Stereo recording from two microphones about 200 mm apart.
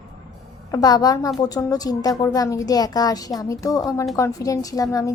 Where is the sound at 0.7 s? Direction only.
20° left (ahead or behind).